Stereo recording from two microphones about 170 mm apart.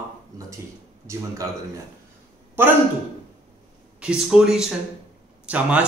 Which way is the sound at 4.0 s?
5° right (ahead or behind).